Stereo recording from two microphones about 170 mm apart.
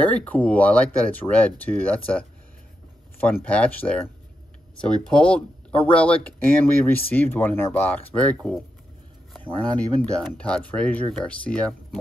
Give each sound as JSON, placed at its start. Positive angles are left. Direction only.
{"t": 0.0, "sound": "speech", "side_deg": 10}
{"t": 3.4, "sound": "speech", "side_deg": 5}
{"t": 9.8, "sound": "speech", "side_deg": 5}